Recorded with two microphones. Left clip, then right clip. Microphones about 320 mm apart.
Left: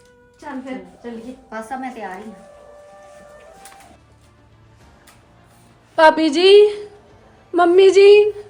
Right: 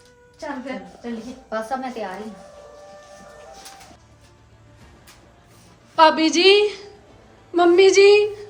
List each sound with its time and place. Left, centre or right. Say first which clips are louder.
1.5 s a woman's voice: right 2 dB; centre
6.0 s a woman's voice: left 2 dB; left